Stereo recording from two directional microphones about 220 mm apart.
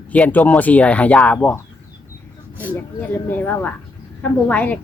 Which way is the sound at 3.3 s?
10° left (ahead or behind).